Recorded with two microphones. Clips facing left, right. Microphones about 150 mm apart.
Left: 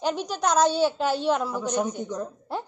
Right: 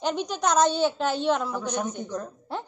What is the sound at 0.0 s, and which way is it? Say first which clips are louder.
A woman's voice: even; 5° left (ahead or behind).